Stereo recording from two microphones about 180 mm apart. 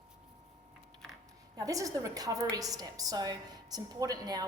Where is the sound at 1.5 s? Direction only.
20° right (ahead or behind).